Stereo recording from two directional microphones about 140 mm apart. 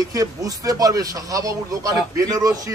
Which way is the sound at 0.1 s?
25° right (ahead or behind).